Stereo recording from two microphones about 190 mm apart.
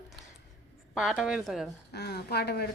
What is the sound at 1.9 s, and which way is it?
Speech, 60° left (ahead or behind).